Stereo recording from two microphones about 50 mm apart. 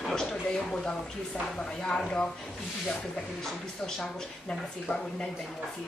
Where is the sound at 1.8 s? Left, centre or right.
Centre.